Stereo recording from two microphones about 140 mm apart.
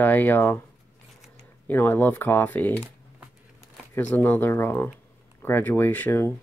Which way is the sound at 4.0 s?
10° left (ahead or behind).